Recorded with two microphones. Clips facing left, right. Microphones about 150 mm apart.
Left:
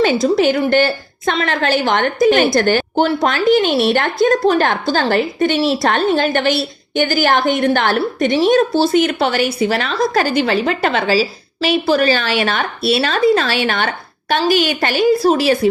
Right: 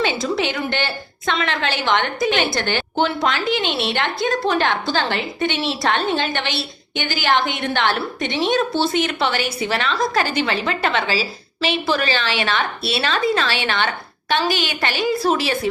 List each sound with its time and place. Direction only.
0.0 s a woman's voice: 40° left (ahead or behind)